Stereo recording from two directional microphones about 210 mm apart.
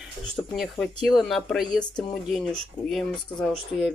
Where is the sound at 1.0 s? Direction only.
Centre (ahead or behind).